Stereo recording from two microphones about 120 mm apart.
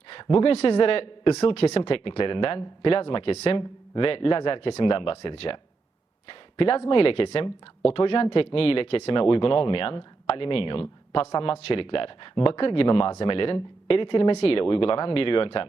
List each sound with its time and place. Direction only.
0.1 s a sound: 40° left (ahead or behind)
0.5 s speech: 50° left (ahead or behind)
6.6 s speech: 50° left (ahead or behind)